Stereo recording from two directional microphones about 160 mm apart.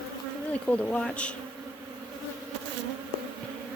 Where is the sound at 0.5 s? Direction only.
10° left (ahead or behind).